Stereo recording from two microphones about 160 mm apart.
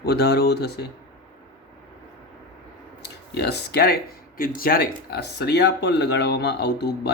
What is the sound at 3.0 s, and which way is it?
Speech, 90° left.